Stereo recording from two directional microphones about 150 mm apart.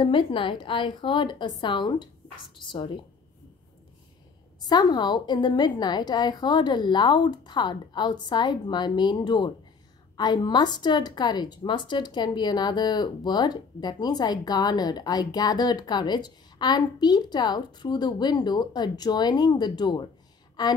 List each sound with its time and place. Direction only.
0.0 s a woman's voice: 35° left (ahead or behind)
4.6 s a woman's voice: 30° left (ahead or behind)